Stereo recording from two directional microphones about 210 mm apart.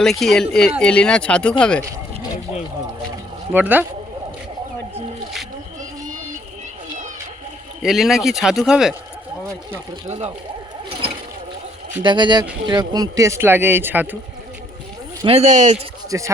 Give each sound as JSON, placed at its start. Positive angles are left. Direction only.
{"t": 0.0, "sound": "speech", "side_deg": 0}
{"t": 3.5, "sound": "speech", "side_deg": -10}
{"t": 7.8, "sound": "speech", "side_deg": 0}
{"t": 10.1, "sound": "speech", "side_deg": -30}
{"t": 12.0, "sound": "speech", "side_deg": -20}
{"t": 15.2, "sound": "speech", "side_deg": -30}
{"t": 16.0, "sound": "speech", "side_deg": -15}